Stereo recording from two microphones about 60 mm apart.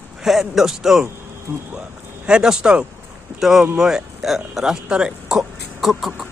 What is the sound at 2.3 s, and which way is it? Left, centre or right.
Speech, centre.